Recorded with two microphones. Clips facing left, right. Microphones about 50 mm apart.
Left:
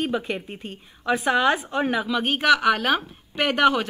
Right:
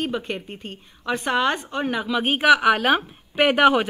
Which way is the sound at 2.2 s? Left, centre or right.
Centre.